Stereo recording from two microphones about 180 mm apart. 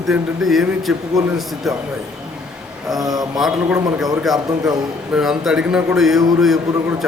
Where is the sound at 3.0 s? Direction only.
20° right (ahead or behind).